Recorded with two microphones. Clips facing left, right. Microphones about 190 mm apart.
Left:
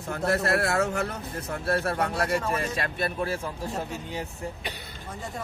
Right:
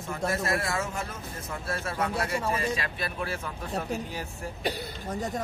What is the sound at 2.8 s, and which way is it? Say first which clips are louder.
Speech: left 4 dB; 40° left (ahead or behind).